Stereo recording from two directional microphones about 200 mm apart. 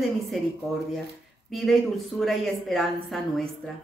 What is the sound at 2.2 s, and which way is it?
A woman's voice, centre (ahead or behind).